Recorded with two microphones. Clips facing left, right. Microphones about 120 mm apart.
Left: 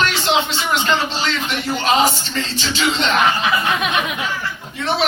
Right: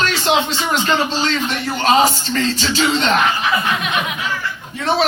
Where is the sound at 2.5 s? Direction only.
40° right (ahead or behind).